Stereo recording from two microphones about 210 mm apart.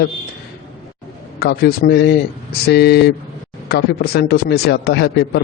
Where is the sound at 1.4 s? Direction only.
50° left (ahead or behind).